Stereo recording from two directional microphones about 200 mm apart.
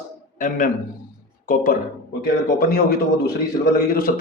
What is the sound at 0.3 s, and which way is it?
Speech, 40° left (ahead or behind).